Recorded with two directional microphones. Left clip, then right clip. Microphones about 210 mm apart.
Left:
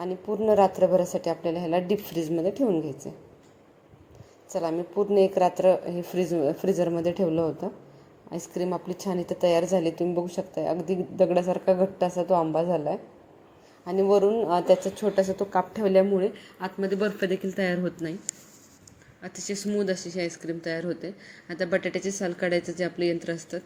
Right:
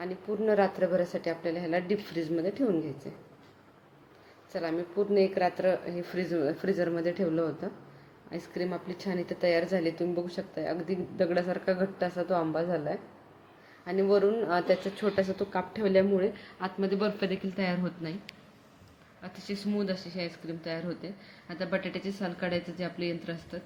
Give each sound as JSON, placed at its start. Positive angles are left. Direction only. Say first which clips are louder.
{"t": 0.0, "sound": "a woman's voice", "louder": "left 4 dB", "side_deg": 15}
{"t": 4.5, "sound": "a woman's voice", "louder": "left 4 dB", "side_deg": 15}
{"t": 19.2, "sound": "a woman's voice", "louder": "left 5 dB", "side_deg": 10}